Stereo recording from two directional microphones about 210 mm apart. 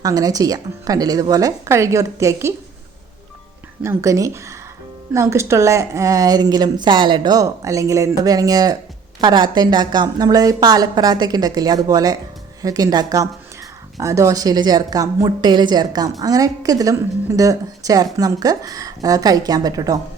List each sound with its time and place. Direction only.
0.0 s a woman's voice: 15° right (ahead or behind)
3.8 s a woman's voice: 15° right (ahead or behind)